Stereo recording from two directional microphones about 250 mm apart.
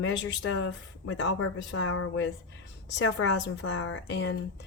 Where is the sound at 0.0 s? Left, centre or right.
Left.